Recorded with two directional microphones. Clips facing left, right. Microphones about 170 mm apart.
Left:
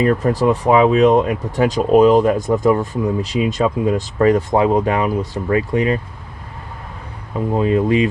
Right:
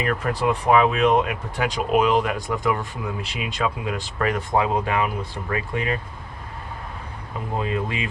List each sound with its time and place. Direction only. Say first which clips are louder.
0.0 s speech: left 8 dB; 30° left (ahead or behind)
7.5 s speech: left 11 dB; 35° left (ahead or behind)